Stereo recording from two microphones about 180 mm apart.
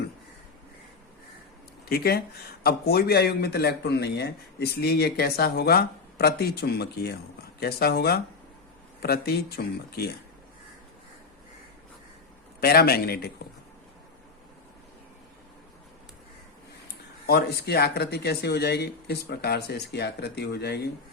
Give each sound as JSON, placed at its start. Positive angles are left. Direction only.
{"t": 1.9, "sound": "speech", "side_deg": 60}
{"t": 12.5, "sound": "speech", "side_deg": 60}
{"t": 17.2, "sound": "speech", "side_deg": 60}